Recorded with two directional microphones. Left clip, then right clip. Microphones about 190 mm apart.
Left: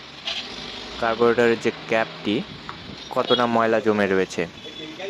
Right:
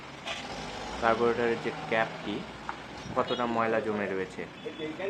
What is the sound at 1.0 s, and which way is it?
Speech, 40° left (ahead or behind).